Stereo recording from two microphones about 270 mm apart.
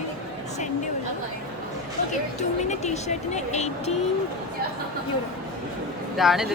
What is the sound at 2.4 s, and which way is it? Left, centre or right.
Speech, left.